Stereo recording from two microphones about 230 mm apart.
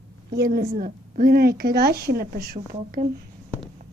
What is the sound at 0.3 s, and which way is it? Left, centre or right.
A woman's voice, right.